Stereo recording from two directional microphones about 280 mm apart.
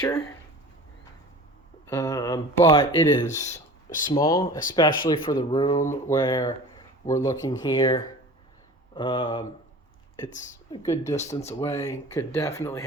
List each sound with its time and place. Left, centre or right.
0.0 s speech: centre
1.9 s speech: centre; by 4.2 s left
4.2 s speech: centre
10.7 s speech: centre